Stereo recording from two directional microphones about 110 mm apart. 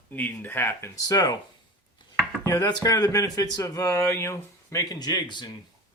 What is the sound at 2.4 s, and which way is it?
Speech, 35° left (ahead or behind).